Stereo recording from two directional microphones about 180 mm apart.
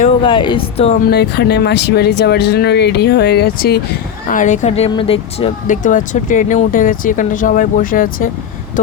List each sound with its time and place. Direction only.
0.2 s speech: 25° left (ahead or behind)
1.0 s speech: 65° left (ahead or behind)
4.3 s speech: 45° left (ahead or behind)
5.6 s speech: 45° left (ahead or behind)